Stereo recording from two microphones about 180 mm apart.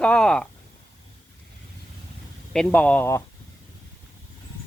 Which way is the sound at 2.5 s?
5° left (ahead or behind).